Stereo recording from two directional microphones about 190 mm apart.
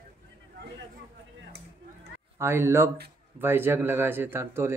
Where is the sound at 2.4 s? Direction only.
10° right (ahead or behind).